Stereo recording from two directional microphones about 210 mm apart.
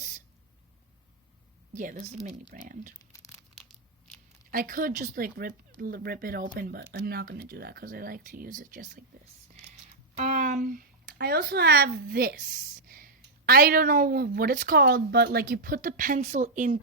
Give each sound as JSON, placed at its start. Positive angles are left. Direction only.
{"t": 1.7, "sound": "speech", "side_deg": -35}
{"t": 3.1, "sound": "tearing", "side_deg": 15}
{"t": 4.5, "sound": "speech", "side_deg": -40}
{"t": 10.2, "sound": "speech", "side_deg": -35}